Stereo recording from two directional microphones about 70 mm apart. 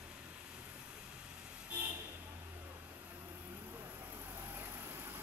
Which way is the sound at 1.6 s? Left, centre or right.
Right.